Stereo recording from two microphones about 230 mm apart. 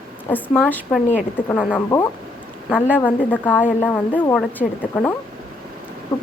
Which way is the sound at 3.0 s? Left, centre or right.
Centre.